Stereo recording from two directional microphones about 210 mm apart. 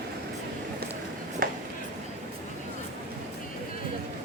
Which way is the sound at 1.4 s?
45° right (ahead or behind).